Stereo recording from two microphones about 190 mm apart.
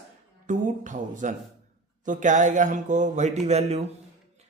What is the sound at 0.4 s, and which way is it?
Speech, 40° right (ahead or behind).